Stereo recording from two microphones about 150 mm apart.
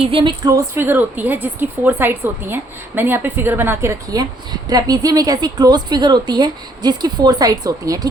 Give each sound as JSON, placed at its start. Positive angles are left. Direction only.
{"t": 0.0, "sound": "a woman's voice", "side_deg": -35}
{"t": 0.5, "sound": "a woman's voice", "side_deg": -15}